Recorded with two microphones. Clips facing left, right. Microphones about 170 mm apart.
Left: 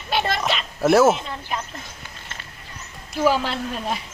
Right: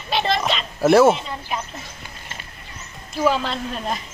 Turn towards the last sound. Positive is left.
turn(degrees=5)  # may be behind; listen again after turning